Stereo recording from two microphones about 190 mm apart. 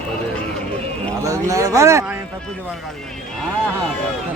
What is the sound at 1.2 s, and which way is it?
Speech, 15° right (ahead or behind).